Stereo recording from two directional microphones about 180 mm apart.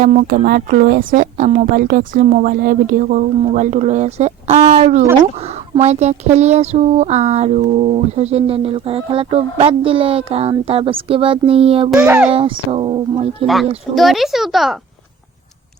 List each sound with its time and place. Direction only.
0.0 s a woman's voice: 45° right (ahead or behind)
1.1 s a woman's voice: 40° right (ahead or behind)
11.9 s a child's voice: 10° right (ahead or behind)
12.3 s speech: 30° right (ahead or behind)
13.9 s a child's voice: centre (ahead or behind)